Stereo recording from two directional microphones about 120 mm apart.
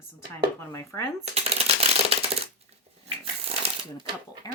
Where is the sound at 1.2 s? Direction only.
60° right (ahead or behind).